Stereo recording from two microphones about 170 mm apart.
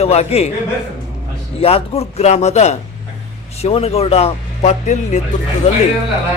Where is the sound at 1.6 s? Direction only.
35° left (ahead or behind).